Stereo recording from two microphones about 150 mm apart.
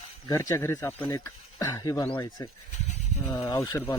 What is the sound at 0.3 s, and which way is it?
Speech, 20° left (ahead or behind).